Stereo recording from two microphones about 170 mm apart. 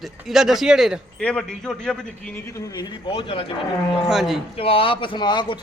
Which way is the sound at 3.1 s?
35° left (ahead or behind).